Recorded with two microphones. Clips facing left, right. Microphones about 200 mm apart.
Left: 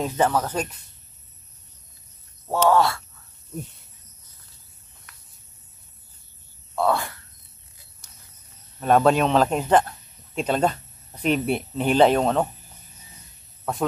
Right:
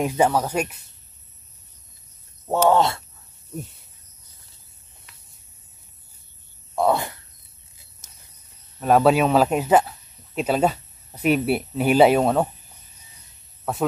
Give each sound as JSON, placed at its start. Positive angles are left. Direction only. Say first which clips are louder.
{"t": 0.0, "sound": "speech", "louder": "right 2 dB", "side_deg": -10}
{"t": 2.7, "sound": "speech", "louder": "left 1 dB", "side_deg": -20}
{"t": 6.7, "sound": "speech", "louder": "right 2 dB", "side_deg": -20}
{"t": 8.0, "sound": "cricket", "louder": "even", "side_deg": -20}
{"t": 8.7, "sound": "speech", "louder": "right 1 dB", "side_deg": -5}
{"t": 13.7, "sound": "speech", "louder": "right 1 dB", "side_deg": -5}